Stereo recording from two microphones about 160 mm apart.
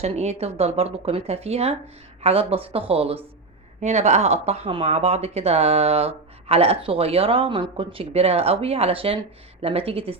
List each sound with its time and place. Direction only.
0.0 s speech: 40° right (ahead or behind)